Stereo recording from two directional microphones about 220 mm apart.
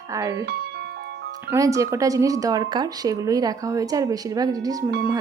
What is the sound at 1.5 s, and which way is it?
A woman's voice, 15° right (ahead or behind).